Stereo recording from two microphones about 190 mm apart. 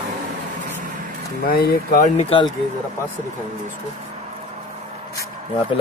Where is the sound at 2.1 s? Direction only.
30° left (ahead or behind).